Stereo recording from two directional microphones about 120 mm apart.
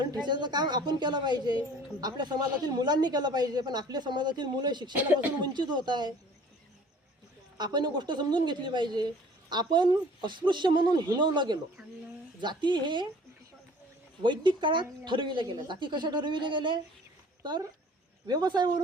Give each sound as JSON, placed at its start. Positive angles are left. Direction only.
{"t": 0.0, "sound": "speech", "side_deg": -35}
{"t": 4.9, "sound": "speech", "side_deg": -15}
{"t": 5.4, "sound": "speech", "side_deg": -40}
{"t": 7.6, "sound": "speech", "side_deg": -35}
{"t": 14.2, "sound": "speech", "side_deg": -40}
{"t": 18.3, "sound": "speech", "side_deg": -35}